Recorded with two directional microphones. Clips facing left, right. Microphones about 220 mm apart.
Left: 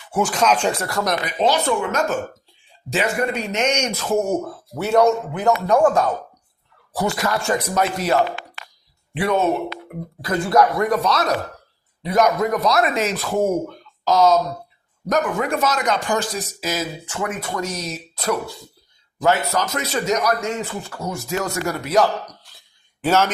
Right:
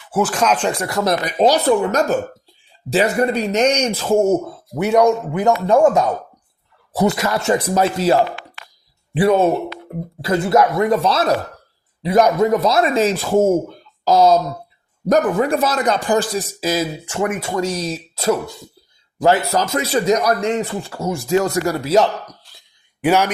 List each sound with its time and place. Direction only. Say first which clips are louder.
0.1 s speech: right 2 dB; 5° right (ahead or behind)
1.4 s speech: right 5 dB; 40° right (ahead or behind); by 5.4 s 15° right (ahead or behind)
5.5 s speech: right 3 dB; 25° right (ahead or behind)
23.0 s speech: right 2 dB; 15° right (ahead or behind)